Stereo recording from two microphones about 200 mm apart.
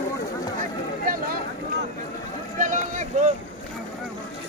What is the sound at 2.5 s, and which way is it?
Run, 40° right (ahead or behind).